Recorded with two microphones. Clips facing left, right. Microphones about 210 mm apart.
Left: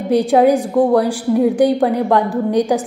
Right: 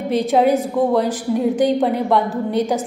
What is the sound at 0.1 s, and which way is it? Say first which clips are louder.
A woman's voice: left 4 dB; 15° left (ahead or behind).